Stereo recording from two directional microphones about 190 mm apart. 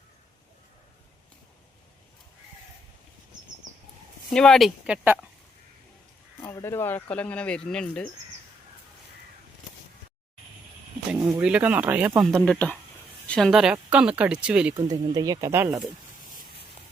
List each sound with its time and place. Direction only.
4.3 s speech: centre (ahead or behind)
6.4 s speech: 15° left (ahead or behind)
11.1 s speech: 5° right (ahead or behind)
15.1 s speech: 20° right (ahead or behind)